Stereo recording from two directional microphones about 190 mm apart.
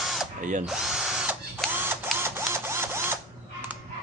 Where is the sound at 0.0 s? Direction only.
Centre (ahead or behind).